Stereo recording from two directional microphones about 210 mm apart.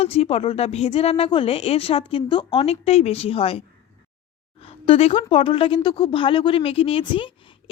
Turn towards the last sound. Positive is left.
turn(degrees=25)  # may be behind; listen again after turning